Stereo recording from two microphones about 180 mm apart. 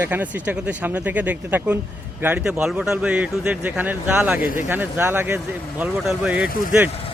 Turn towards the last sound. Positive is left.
turn(degrees=-5)  # may be behind; listen again after turning